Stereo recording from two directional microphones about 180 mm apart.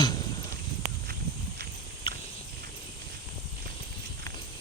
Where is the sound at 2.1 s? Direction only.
30° left (ahead or behind).